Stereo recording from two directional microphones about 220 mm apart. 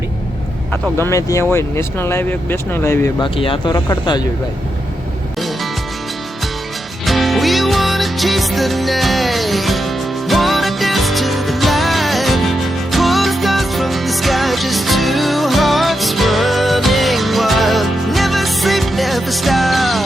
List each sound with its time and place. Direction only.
0.7 s speech: 10° left (ahead or behind)
3.2 s speech: 25° left (ahead or behind)
7.0 s music: centre (ahead or behind)